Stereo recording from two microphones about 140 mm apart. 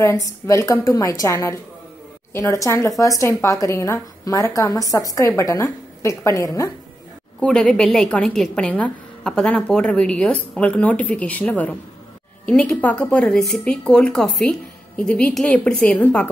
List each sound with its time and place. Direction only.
0.0 s a woman's voice: 20° left (ahead or behind)
7.3 s a woman's voice: 5° left (ahead or behind)